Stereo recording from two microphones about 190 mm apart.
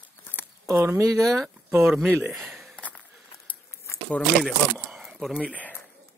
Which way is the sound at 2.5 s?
Centre (ahead or behind).